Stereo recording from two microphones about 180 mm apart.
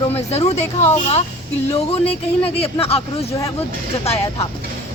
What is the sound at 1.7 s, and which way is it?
Speech, 35° left (ahead or behind).